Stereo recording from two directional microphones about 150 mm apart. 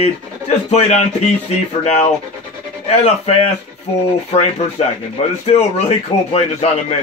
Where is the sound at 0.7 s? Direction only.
50° left (ahead or behind).